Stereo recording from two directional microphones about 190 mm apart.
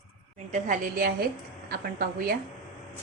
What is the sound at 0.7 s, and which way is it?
A woman's voice, 50° right (ahead or behind).